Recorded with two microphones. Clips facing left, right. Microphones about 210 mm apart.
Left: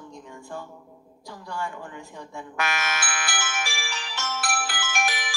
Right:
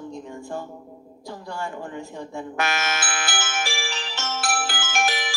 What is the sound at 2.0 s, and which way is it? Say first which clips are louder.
Music: right 6 dB; 25° right (ahead or behind).